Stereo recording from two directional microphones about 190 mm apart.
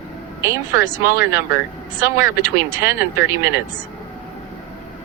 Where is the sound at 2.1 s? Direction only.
15° right (ahead or behind).